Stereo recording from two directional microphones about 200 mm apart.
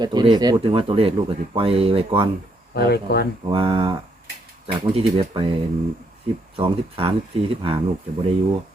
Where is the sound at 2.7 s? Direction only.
55° left (ahead or behind).